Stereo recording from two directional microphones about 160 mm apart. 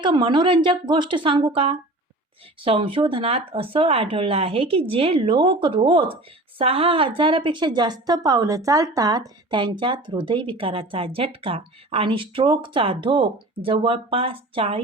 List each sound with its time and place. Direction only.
0.0 s a woman's voice: 30° right (ahead or behind)